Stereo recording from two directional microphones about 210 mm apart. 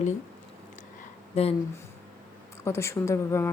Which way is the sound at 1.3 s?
30° left (ahead or behind).